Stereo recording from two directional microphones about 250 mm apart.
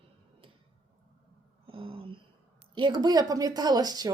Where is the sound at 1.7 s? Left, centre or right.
Right.